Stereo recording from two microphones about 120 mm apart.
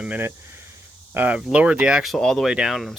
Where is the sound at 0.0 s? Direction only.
15° right (ahead or behind).